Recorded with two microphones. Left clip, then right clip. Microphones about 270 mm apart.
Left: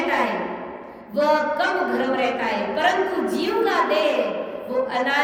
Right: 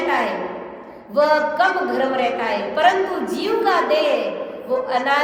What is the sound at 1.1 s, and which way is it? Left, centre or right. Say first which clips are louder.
A woman's voice: right 3 dB; centre.